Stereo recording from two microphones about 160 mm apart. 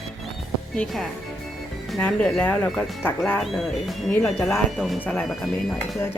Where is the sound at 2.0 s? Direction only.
10° left (ahead or behind).